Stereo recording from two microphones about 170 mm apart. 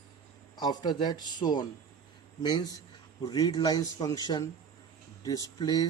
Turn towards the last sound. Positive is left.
turn(degrees=20)  # may be behind; listen again after turning